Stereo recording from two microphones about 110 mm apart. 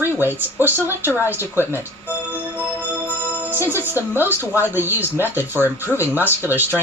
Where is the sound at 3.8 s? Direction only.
20° right (ahead or behind).